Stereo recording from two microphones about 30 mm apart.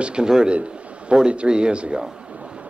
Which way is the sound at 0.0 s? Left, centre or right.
Right.